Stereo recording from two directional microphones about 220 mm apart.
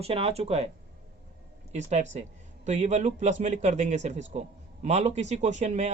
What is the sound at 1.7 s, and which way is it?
Speech, 30° right (ahead or behind).